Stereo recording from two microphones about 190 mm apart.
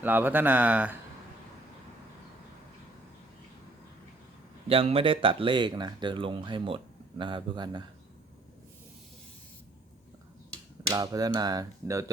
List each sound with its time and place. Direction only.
0.0 s speech: 10° right (ahead or behind)
4.7 s speech: 30° right (ahead or behind)
10.8 s speech: 20° right (ahead or behind)